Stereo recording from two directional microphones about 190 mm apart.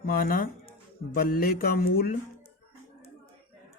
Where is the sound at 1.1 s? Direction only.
50° left (ahead or behind).